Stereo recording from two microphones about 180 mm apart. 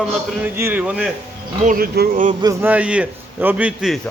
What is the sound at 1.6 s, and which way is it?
Speech, 50° right (ahead or behind).